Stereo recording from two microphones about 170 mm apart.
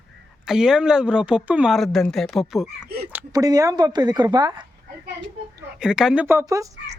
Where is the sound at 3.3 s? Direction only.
20° right (ahead or behind).